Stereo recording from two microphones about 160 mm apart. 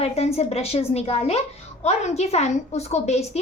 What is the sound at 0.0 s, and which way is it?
A woman's voice, 40° left (ahead or behind).